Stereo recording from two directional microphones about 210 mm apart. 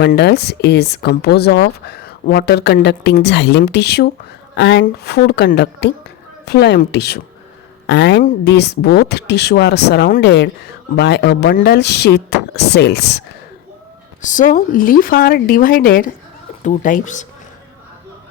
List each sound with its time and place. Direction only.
0.0 s speech: 50° left (ahead or behind)
14.2 s speech: 40° left (ahead or behind)